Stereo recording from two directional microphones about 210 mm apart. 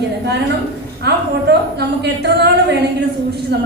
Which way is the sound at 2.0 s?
55° right (ahead or behind).